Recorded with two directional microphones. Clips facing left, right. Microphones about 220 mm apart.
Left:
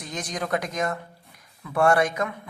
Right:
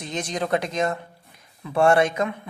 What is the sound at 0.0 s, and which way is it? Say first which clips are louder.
A man's voice: right 4 dB; 25° right (ahead or behind).